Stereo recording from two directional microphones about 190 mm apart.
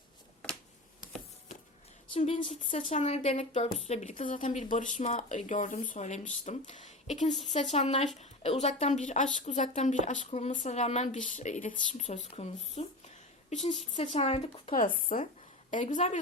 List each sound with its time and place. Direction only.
2.1 s speech: 30° left (ahead or behind)
2.6 s speech: 40° left (ahead or behind)
14.7 s speech: 45° left (ahead or behind)